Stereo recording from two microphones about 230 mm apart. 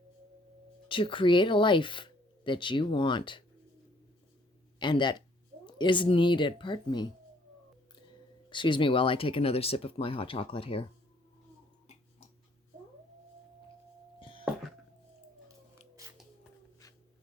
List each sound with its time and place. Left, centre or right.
0.9 s speech: left
4.8 s speech: centre
8.4 s speech: left
14.2 s a sound: left